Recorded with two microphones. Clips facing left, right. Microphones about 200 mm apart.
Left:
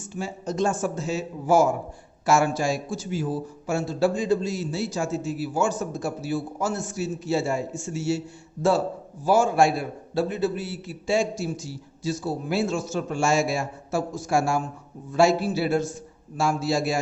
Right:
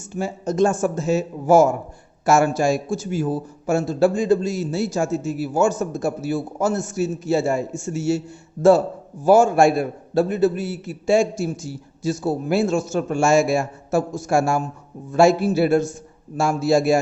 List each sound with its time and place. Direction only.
0.1 s a man's voice: 50° right (ahead or behind)
9.2 s a man's voice: 50° right (ahead or behind)